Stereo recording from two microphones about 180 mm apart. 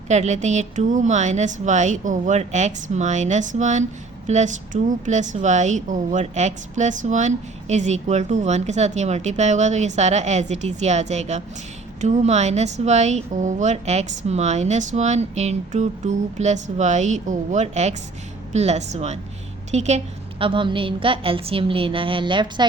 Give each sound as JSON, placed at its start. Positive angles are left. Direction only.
{"t": 0.1, "sound": "a woman's voice", "side_deg": -40}
{"t": 20.4, "sound": "a woman's voice", "side_deg": -30}